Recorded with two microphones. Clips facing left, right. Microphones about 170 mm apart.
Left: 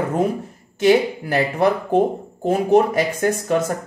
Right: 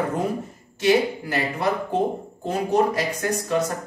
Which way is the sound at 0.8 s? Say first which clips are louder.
Left 4 dB; 60° left (ahead or behind).